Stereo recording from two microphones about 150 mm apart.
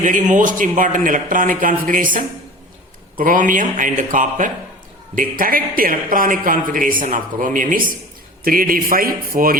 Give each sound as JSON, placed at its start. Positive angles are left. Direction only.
{"t": 0.0, "sound": "speech", "side_deg": -55}
{"t": 8.4, "sound": "speech", "side_deg": -70}